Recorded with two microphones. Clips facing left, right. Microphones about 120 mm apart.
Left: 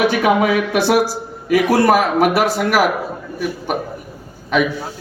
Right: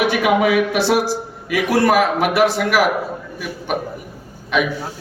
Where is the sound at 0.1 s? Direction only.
45° left (ahead or behind).